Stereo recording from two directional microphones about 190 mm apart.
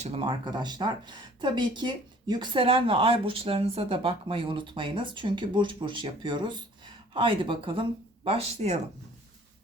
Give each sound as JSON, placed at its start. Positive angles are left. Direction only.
{"t": 0.0, "sound": "speech", "side_deg": -30}